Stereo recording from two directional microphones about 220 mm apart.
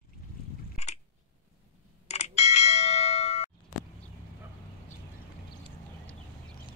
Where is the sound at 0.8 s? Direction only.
30° left (ahead or behind).